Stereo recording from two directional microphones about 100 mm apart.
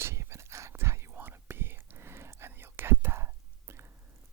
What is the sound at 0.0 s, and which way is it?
Whispering, 25° right (ahead or behind).